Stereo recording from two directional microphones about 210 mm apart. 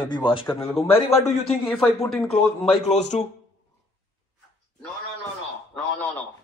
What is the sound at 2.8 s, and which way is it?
Speech, 30° left (ahead or behind).